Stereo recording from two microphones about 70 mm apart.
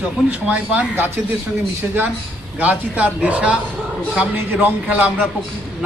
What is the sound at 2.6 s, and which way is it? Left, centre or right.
Speech, right.